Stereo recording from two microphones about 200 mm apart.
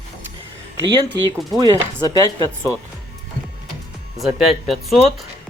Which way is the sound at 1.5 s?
20° right (ahead or behind).